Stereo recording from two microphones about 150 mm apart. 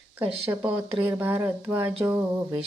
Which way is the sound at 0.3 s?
40° right (ahead or behind).